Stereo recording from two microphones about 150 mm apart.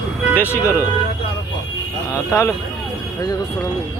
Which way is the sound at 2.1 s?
20° left (ahead or behind).